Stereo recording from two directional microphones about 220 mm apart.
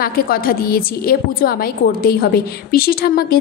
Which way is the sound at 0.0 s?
40° left (ahead or behind).